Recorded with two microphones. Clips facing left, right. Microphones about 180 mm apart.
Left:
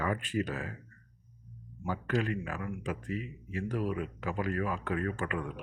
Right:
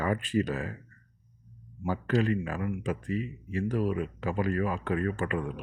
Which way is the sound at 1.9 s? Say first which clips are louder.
Right 5 dB; 30° right (ahead or behind).